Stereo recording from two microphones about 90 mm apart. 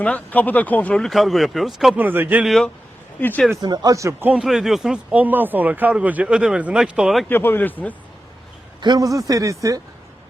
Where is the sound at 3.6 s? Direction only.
50° right (ahead or behind).